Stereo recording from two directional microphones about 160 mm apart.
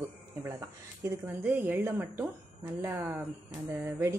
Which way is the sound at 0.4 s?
15° right (ahead or behind).